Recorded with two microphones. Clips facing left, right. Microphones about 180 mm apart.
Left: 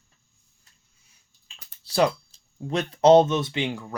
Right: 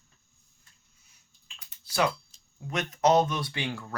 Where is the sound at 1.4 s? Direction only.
30° left (ahead or behind).